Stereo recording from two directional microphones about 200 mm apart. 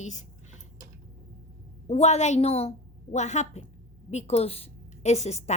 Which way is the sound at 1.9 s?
35° left (ahead or behind).